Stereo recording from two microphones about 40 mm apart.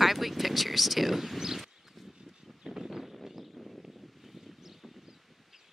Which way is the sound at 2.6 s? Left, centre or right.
Centre.